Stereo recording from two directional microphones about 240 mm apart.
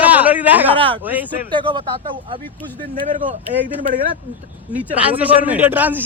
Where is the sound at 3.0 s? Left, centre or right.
Right.